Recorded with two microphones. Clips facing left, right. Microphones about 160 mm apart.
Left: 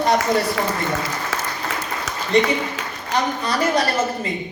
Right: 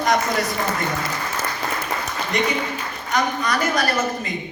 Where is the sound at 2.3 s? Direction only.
30° left (ahead or behind).